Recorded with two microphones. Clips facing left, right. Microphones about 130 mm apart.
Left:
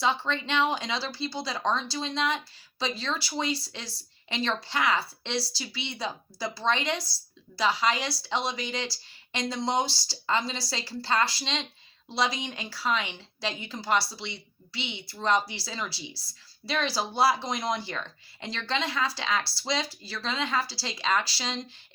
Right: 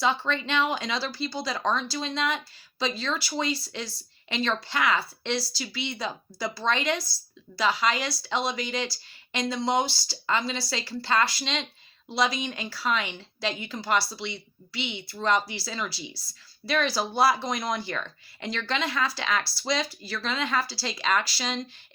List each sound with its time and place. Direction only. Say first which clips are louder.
0.0 s speech: right 1 dB; 25° left (ahead or behind)